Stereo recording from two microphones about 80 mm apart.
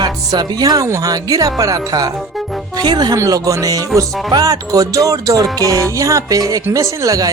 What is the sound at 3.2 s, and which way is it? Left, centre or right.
Speech, right.